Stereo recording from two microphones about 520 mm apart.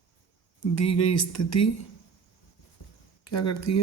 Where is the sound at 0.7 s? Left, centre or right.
Left.